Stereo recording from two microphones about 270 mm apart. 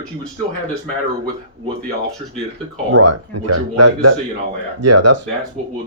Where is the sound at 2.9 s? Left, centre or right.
Right.